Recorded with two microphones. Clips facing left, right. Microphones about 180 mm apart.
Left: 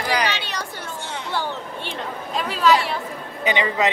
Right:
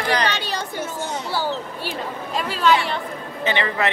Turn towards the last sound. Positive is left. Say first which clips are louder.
# left 1 dB
turn(degrees=15)  # may be behind; listen again after turning